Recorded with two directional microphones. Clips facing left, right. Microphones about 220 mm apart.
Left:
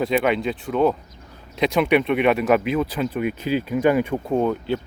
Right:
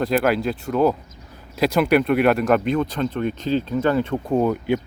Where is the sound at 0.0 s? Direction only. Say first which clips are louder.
Right 1 dB; centre (ahead or behind).